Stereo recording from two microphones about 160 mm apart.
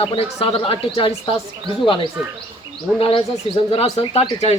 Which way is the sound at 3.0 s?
35° left (ahead or behind).